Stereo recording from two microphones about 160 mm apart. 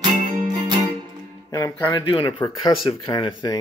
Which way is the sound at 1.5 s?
20° left (ahead or behind).